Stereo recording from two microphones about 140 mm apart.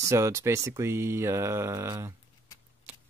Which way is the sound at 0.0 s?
20° right (ahead or behind).